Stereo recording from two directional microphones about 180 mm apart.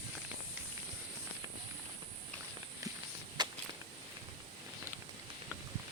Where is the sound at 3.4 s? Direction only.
25° right (ahead or behind).